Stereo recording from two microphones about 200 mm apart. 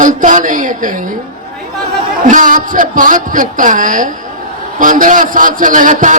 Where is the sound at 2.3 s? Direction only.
40° right (ahead or behind).